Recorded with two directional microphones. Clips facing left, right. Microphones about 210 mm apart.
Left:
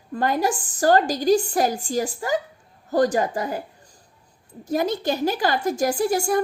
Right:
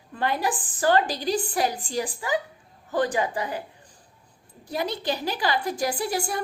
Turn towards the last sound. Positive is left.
turn(degrees=45)  # may be behind; listen again after turning